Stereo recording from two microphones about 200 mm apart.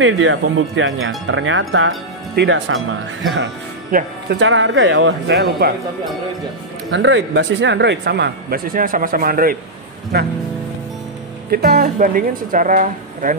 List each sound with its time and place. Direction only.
0.0 s speech: 70° right (ahead or behind)
2.3 s speech: 60° right (ahead or behind)
3.9 s speech: 45° right (ahead or behind)
4.4 s speech: 65° right (ahead or behind)
6.9 s speech: 65° right (ahead or behind)
11.5 s speech: 50° right (ahead or behind)